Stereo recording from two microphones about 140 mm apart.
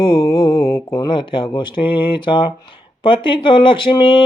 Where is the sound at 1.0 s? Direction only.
35° left (ahead or behind).